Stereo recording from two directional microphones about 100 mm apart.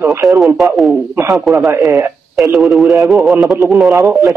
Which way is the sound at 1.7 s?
25° right (ahead or behind).